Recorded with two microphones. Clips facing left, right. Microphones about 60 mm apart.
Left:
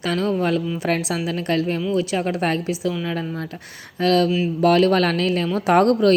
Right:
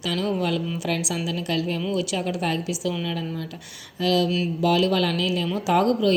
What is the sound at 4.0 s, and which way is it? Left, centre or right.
A woman's voice, left.